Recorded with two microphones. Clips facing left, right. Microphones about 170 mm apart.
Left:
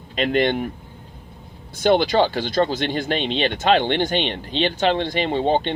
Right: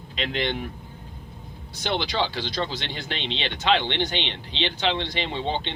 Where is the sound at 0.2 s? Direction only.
50° left (ahead or behind).